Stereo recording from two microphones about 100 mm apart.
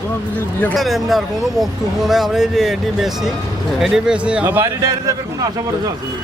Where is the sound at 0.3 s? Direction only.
15° left (ahead or behind).